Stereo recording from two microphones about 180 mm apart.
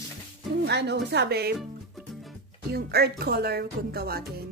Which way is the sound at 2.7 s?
60° right (ahead or behind).